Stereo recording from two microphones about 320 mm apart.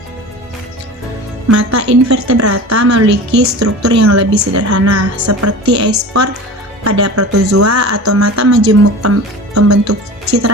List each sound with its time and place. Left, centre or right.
1.5 s a woman's voice: right
7.0 s speech: right
8.6 s a woman's voice: right